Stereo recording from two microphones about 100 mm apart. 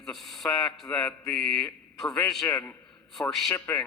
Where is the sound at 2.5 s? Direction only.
15° left (ahead or behind).